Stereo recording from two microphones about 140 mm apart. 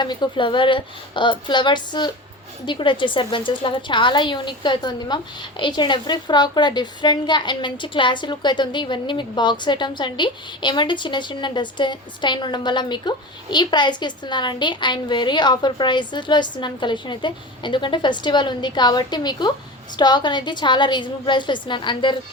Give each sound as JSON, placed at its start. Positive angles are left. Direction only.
{"t": 0.0, "sound": "a woman's voice", "side_deg": 30}